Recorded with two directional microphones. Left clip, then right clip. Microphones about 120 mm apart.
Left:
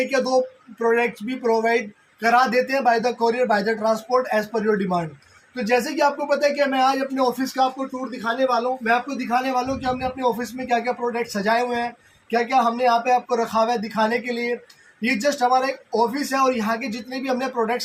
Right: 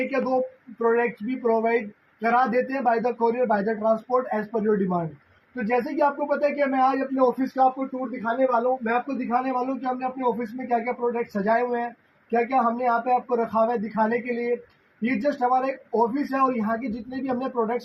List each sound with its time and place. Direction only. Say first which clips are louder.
0.1 s speech: left 4 dB; 30° left (ahead or behind)